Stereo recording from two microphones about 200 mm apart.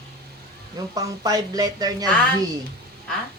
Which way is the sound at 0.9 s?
20° right (ahead or behind).